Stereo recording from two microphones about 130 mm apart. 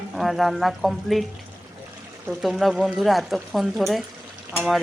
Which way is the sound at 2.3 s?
Centre (ahead or behind).